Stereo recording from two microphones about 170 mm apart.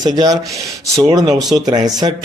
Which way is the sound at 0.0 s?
25° right (ahead or behind).